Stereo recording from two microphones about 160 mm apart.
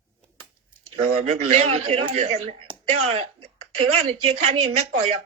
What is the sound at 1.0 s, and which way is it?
Speech, 45° right (ahead or behind).